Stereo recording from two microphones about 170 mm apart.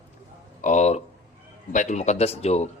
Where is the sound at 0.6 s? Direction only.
45° left (ahead or behind).